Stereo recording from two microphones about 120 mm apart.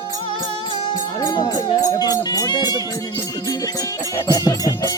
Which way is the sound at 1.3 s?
35° left (ahead or behind).